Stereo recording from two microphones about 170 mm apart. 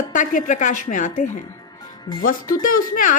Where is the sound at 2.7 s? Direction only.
50° left (ahead or behind).